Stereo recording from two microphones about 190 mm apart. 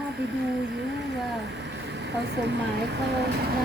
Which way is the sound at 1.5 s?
65° right (ahead or behind).